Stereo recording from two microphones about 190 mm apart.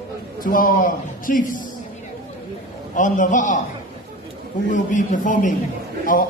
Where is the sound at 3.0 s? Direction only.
40° left (ahead or behind).